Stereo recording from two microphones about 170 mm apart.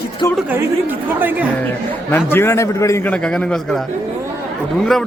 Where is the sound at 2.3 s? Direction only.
15° left (ahead or behind).